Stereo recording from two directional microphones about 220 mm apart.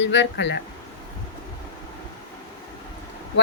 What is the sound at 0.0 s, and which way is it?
Speech, 55° left (ahead or behind).